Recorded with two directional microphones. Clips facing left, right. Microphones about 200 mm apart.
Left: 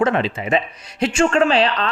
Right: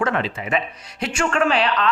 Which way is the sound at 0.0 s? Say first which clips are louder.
Left 4 dB; 25° left (ahead or behind).